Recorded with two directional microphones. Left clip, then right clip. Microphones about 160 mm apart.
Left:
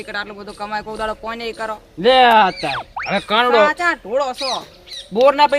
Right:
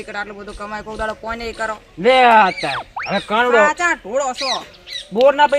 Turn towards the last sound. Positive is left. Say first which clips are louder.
# even
turn(degrees=-5)  # may be behind; listen again after turning